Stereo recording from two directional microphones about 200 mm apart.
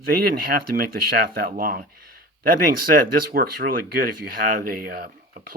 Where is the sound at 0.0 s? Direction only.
50° right (ahead or behind).